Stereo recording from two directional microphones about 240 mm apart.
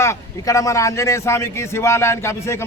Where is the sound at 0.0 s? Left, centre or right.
Centre.